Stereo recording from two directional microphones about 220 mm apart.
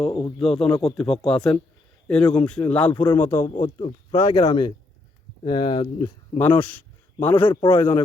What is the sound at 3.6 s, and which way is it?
Speech, 25° left (ahead or behind).